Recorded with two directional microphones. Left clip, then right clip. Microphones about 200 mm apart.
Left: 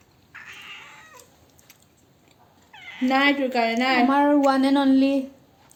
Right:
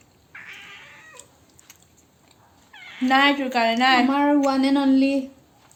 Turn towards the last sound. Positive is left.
turn(degrees=10)  # may be behind; listen again after turning